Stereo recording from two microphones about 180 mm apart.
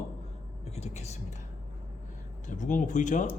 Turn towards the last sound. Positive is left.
turn(degrees=40)  # may be behind; listen again after turning